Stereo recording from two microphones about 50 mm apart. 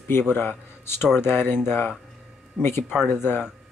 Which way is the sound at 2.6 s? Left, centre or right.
Left.